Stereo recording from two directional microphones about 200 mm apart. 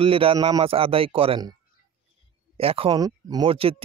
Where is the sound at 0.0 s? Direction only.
25° right (ahead or behind).